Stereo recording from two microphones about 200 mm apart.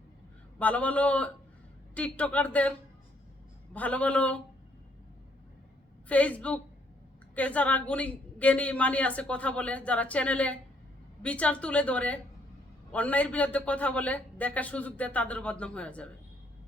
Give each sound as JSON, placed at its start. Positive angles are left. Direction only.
{"t": 0.6, "sound": "a woman's voice", "side_deg": 5}
{"t": 3.8, "sound": "a woman's voice", "side_deg": 5}
{"t": 6.1, "sound": "a woman's voice", "side_deg": 5}